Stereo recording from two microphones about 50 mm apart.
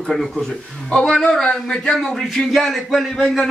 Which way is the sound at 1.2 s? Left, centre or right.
Centre.